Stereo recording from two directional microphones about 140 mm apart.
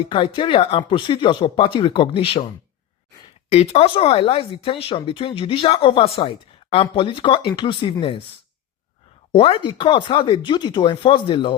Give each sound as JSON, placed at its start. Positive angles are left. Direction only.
{"t": 0.1, "sound": "speech", "side_deg": 40}
{"t": 3.5, "sound": "speech", "side_deg": 45}
{"t": 9.3, "sound": "speech", "side_deg": 45}